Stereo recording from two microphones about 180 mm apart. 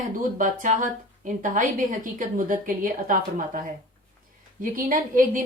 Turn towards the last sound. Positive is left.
turn(degrees=-50)  # may be behind; listen again after turning